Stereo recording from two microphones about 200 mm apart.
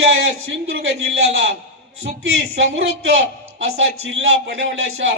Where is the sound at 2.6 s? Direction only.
65° right (ahead or behind).